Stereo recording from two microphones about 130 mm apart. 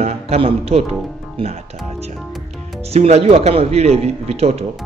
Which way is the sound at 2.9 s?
55° right (ahead or behind).